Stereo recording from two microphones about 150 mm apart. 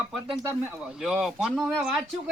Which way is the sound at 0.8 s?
5° right (ahead or behind).